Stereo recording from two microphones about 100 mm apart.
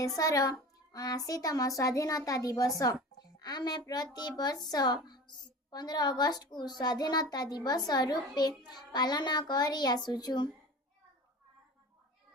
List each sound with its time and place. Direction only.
0.2 s a child's voice: 35° left (ahead or behind)